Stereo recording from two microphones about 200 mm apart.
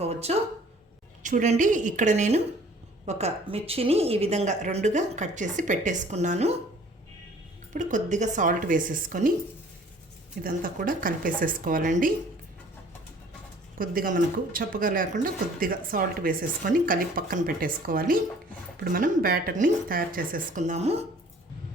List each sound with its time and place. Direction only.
0.0 s a sound: 30° right (ahead or behind)
1.2 s a woman's voice: 40° right (ahead or behind)
7.7 s a woman's voice: 40° right (ahead or behind)
10.4 s speech: 45° right (ahead or behind)
13.7 s speech: 45° right (ahead or behind)